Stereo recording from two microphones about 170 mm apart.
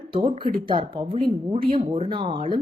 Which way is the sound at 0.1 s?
30° right (ahead or behind).